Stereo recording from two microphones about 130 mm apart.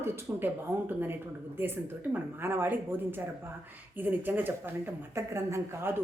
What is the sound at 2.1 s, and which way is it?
A woman's voice, 15° right (ahead or behind).